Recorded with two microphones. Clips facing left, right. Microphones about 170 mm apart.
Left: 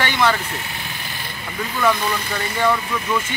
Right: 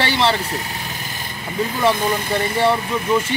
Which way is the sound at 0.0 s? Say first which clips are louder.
Right 1 dB; 30° right (ahead or behind).